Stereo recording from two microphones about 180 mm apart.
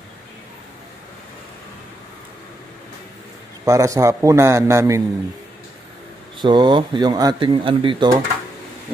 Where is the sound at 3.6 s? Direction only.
15° right (ahead or behind).